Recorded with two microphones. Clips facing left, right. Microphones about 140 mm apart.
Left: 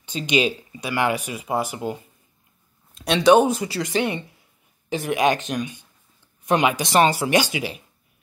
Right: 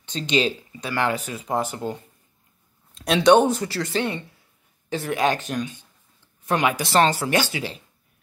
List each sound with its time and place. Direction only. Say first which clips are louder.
0.0 s speech: left 1 dB; 10° left (ahead or behind)
2.9 s speech: even; centre (ahead or behind)